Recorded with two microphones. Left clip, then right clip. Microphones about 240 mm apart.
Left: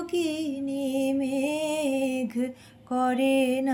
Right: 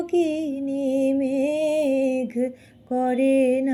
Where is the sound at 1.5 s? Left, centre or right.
Left.